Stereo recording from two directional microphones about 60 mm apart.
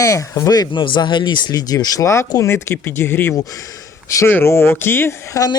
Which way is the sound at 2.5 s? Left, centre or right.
Left.